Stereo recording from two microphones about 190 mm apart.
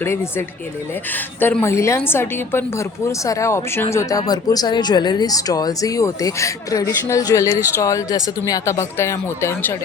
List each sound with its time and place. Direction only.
0.0 s speech: 10° left (ahead or behind)